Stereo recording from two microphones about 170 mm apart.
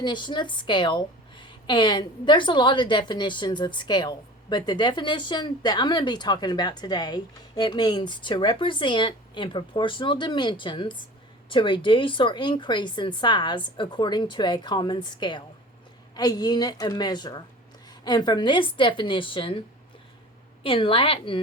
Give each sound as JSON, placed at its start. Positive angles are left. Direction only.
{"t": 0.0, "sound": "a woman's voice", "side_deg": 25}
{"t": 20.7, "sound": "a woman's voice", "side_deg": 30}